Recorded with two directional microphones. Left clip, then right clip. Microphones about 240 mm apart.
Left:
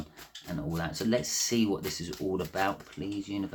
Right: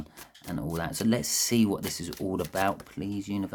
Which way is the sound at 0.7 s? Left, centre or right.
Right.